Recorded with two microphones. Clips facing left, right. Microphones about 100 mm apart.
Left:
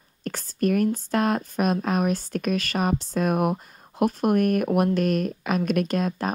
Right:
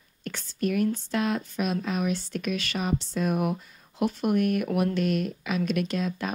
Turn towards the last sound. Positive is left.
turn(degrees=45)  # may be behind; listen again after turning